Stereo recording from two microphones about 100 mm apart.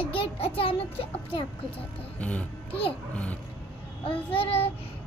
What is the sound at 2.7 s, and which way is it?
Speech, 70° left (ahead or behind).